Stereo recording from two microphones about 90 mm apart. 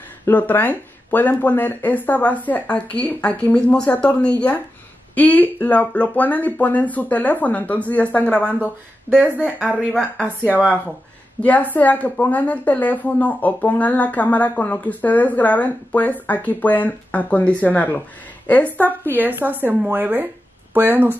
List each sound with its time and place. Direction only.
0.2 s speech: 20° left (ahead or behind)
9.6 s a woman's voice: 10° right (ahead or behind)
11.4 s speech: 20° left (ahead or behind)
19.1 s a woman's voice: 20° right (ahead or behind)